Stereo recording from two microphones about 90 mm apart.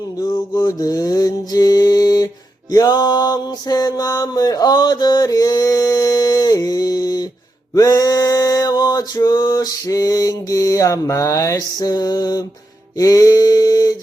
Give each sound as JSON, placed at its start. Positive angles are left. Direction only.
{"t": 0.2, "sound": "mantra", "side_deg": 45}
{"t": 7.7, "sound": "male singing", "side_deg": 40}
{"t": 13.0, "sound": "a sound", "side_deg": 40}